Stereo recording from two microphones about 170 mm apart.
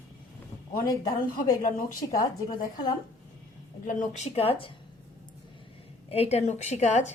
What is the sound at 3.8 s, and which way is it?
Speech, 40° left (ahead or behind).